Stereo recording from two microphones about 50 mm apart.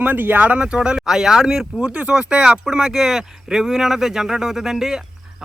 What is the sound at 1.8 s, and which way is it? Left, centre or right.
Speech, right.